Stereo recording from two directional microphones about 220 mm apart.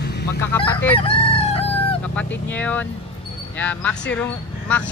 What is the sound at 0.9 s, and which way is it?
Chicken, 25° left (ahead or behind).